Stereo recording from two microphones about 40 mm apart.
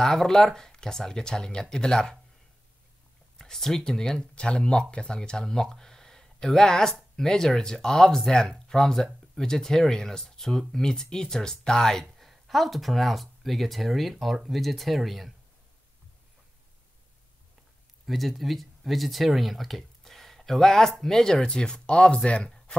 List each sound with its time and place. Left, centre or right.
0.0 s speech: centre
3.3 s speech: centre
4.2 s speech: left; by 15.3 s centre
18.0 s speech: centre; by 22.5 s left